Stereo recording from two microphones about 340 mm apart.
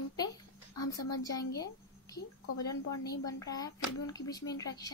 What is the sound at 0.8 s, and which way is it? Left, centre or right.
Speech, left.